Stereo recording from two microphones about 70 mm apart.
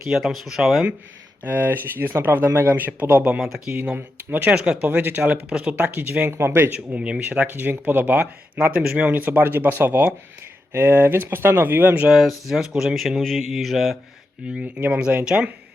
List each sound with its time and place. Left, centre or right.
0.1 s speech: centre
1.5 s speech: right
3.7 s speech: centre
6.2 s speech: right
6.7 s speech: centre
12.0 s speech: centre
14.4 s speech: centre